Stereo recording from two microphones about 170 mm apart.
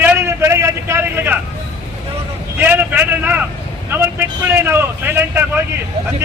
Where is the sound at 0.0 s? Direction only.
15° right (ahead or behind).